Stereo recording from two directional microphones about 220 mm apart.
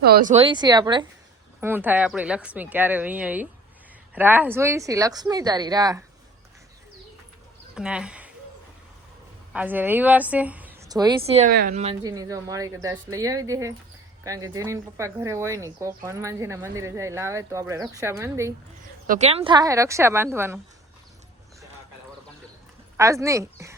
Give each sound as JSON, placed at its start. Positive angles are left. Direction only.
{"t": 0.0, "sound": "speech", "side_deg": -40}
{"t": 0.4, "sound": "a woman's voice", "side_deg": -20}
{"t": 1.6, "sound": "speech", "side_deg": -10}
{"t": 7.8, "sound": "speech", "side_deg": -5}
{"t": 9.5, "sound": "a woman's voice", "side_deg": -5}
{"t": 11.5, "sound": "a woman's voice", "side_deg": -40}
{"t": 12.0, "sound": "speech", "side_deg": -15}
{"t": 19.0, "sound": "speech", "side_deg": -35}
{"t": 23.0, "sound": "speech", "side_deg": -15}